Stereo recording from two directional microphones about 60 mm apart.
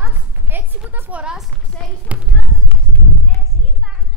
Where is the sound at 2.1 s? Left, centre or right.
Right.